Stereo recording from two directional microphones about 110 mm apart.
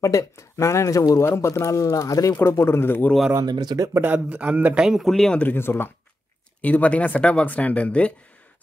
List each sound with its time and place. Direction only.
0.0 s speech: 30° left (ahead or behind)
3.3 s speech: 40° right (ahead or behind)
4.0 s speech: 15° right (ahead or behind)
4.8 s speech: centre (ahead or behind)
5.4 s speech: 20° left (ahead or behind)